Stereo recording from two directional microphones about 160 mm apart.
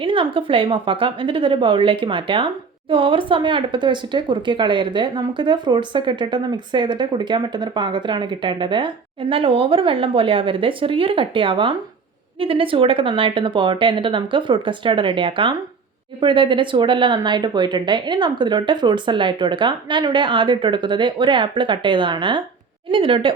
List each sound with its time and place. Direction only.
0.0 s speech: 35° right (ahead or behind)